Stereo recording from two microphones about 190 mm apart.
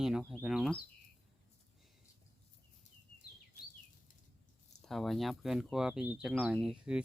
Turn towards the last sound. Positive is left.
turn(degrees=-5)  # may be behind; listen again after turning